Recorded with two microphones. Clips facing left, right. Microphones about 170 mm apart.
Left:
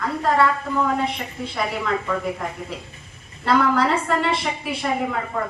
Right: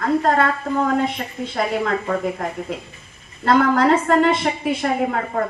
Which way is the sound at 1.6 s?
45° right (ahead or behind).